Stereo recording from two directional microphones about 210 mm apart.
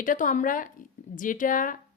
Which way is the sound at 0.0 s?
40° left (ahead or behind).